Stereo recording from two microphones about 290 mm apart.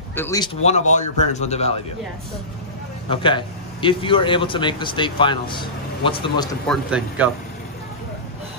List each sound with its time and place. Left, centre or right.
0.1 s speech: centre
0.7 s a man's voice: left
3.1 s a man's voice: centre
6.7 s speech: centre